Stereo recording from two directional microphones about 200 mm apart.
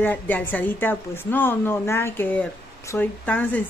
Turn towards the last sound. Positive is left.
turn(degrees=10)  # may be behind; listen again after turning